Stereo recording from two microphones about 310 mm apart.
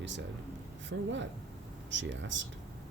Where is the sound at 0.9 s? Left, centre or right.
Right.